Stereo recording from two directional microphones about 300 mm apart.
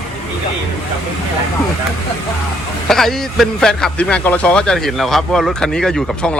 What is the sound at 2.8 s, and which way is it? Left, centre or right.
A man's voice, centre.